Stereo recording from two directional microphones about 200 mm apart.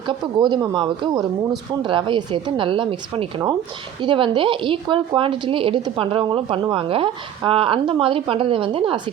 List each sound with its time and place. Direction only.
0.5 s a woman's voice: 25° right (ahead or behind)